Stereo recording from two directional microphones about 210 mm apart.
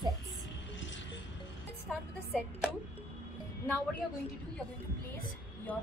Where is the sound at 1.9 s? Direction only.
Centre (ahead or behind).